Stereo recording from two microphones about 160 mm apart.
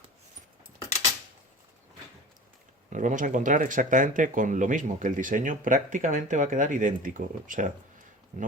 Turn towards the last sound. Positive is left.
turn(degrees=-55)  # may be behind; listen again after turning